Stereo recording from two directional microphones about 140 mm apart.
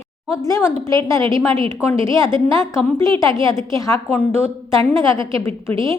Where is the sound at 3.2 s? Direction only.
20° left (ahead or behind).